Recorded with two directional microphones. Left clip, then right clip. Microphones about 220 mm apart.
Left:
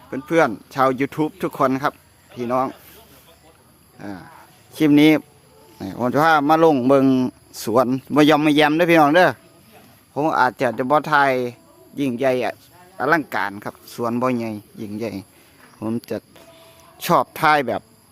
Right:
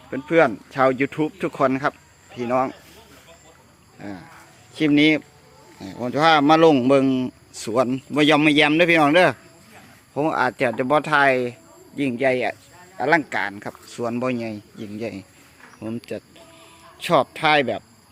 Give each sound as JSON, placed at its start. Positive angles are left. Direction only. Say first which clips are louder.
{"t": 0.1, "sound": "speech", "louder": "even", "side_deg": 10}
{"t": 4.0, "sound": "speech", "louder": "left 2 dB", "side_deg": 15}